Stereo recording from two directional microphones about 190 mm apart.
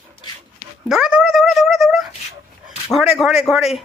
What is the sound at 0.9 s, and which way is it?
Speech, 5° right (ahead or behind).